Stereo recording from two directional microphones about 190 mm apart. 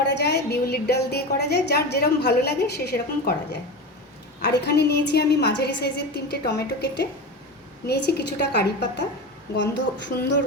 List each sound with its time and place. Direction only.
0.0 s a woman's voice: 65° left (ahead or behind)